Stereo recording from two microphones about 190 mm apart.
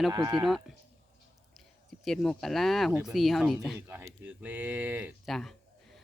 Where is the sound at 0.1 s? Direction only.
20° right (ahead or behind).